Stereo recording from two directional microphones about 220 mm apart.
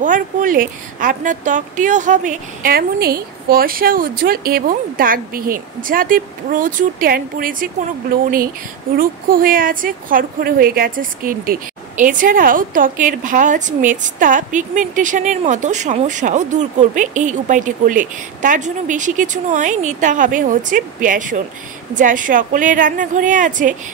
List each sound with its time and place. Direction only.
0.0 s a woman's voice: 35° right (ahead or behind)